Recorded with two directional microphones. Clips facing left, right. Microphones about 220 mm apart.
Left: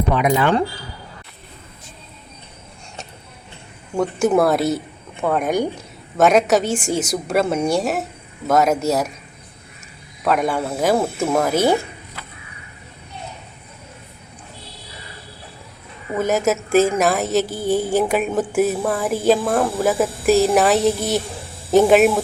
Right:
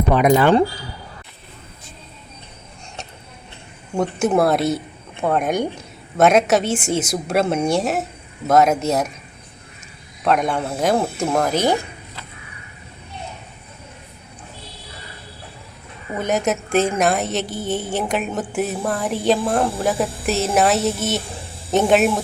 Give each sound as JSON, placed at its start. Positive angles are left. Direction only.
{"t": 0.1, "sound": "speech", "side_deg": -45}
{"t": 4.2, "sound": "a woman's voice", "side_deg": 0}
{"t": 10.2, "sound": "a woman's voice", "side_deg": 5}
{"t": 16.1, "sound": "a woman's voice", "side_deg": 0}
{"t": 17.5, "sound": "speech", "side_deg": -20}
{"t": 17.7, "sound": "a woman's voice", "side_deg": 0}